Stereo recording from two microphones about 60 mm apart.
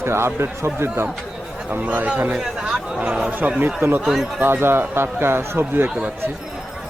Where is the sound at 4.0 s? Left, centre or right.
Centre.